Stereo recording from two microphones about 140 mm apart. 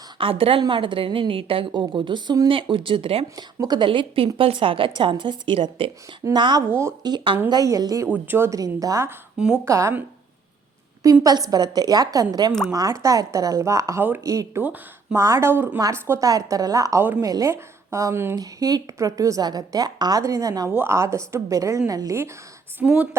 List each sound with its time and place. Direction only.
0.2 s a woman's voice: 40° right (ahead or behind)
3.3 s a woman's voice: 30° right (ahead or behind)
6.7 s a woman's voice: 20° right (ahead or behind)
8.0 s a woman's voice: 15° right (ahead or behind)
11.0 s a woman's voice: 25° right (ahead or behind)
22.8 s speech: 10° right (ahead or behind)